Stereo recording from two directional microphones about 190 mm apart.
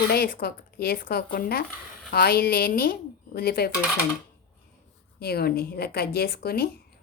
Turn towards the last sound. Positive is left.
turn(degrees=55)  # may be behind; listen again after turning